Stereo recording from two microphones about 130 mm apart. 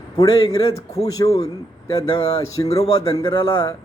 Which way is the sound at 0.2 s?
30° left (ahead or behind).